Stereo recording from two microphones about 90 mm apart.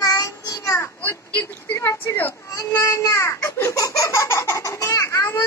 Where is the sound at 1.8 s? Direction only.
30° left (ahead or behind).